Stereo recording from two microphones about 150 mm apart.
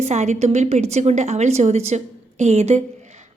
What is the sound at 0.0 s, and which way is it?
A woman's voice, 50° right (ahead or behind).